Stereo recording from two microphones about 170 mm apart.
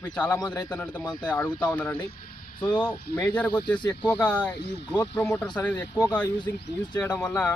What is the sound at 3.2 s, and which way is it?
A man's voice, 5° left (ahead or behind).